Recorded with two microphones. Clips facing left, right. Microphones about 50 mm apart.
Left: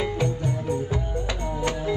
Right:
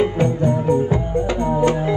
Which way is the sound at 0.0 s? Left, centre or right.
Right.